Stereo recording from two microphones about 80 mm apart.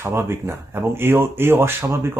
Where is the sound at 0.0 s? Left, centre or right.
Right.